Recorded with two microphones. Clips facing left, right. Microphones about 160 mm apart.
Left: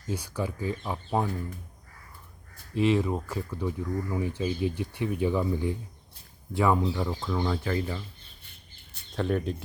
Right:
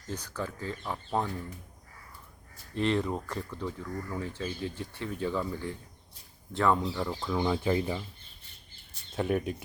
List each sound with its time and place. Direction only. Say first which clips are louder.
0.1 s speech: left 4 dB; 10° left (ahead or behind)
2.7 s speech: left 4 dB; 5° left (ahead or behind)
7.3 s speech: right 2 dB; 10° right (ahead or behind)
9.1 s speech: left 1 dB; 5° right (ahead or behind)